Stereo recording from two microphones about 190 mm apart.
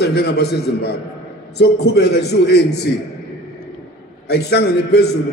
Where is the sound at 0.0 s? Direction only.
60° left (ahead or behind).